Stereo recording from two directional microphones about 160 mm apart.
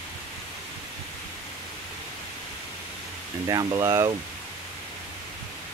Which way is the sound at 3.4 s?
25° right (ahead or behind).